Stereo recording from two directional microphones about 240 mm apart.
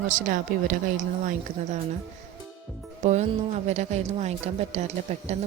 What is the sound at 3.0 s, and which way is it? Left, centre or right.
Speech, right.